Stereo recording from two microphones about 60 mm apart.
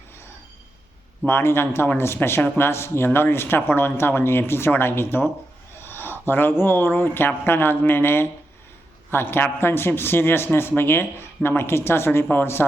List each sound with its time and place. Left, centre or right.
1.3 s a man's voice: left
5.8 s a sound: left
6.6 s a man's voice: left